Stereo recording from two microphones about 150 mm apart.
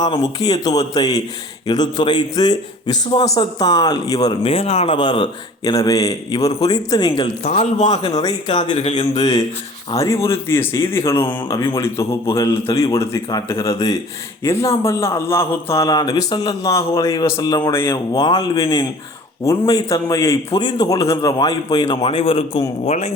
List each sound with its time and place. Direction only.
0.3 s a man's voice: 25° left (ahead or behind)
4.4 s speech: 40° left (ahead or behind)
5.7 s a man's voice: 25° left (ahead or behind)
7.4 s a man's voice: 45° left (ahead or behind)
7.9 s a man's voice: 25° left (ahead or behind)
8.7 s a man's voice: 45° left (ahead or behind)
9.1 s a man's voice: 25° left (ahead or behind)
11.4 s a man's voice: 30° left (ahead or behind)
11.8 s a man's voice: 15° left (ahead or behind); by 22.6 s 35° left (ahead or behind)
22.9 s a man's voice: 50° left (ahead or behind)